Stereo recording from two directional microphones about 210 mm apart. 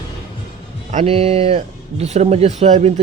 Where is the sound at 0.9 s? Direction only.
30° right (ahead or behind).